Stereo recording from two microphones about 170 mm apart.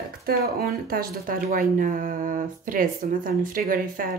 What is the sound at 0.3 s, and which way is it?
Speech, 65° right (ahead or behind).